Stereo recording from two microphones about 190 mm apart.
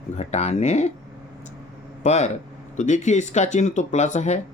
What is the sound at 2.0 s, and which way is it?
Speech, 40° left (ahead or behind).